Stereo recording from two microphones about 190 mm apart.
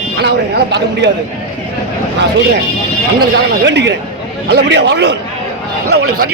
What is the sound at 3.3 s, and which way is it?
Speech, 65° right (ahead or behind).